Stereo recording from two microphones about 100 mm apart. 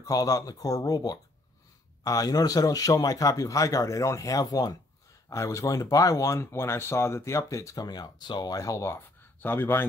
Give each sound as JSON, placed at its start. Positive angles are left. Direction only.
{"t": 0.0, "sound": "a man's voice", "side_deg": 35}